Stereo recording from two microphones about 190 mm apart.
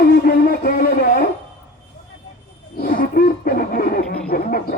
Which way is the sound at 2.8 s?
50° left (ahead or behind).